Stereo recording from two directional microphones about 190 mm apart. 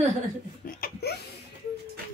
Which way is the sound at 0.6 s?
50° left (ahead or behind).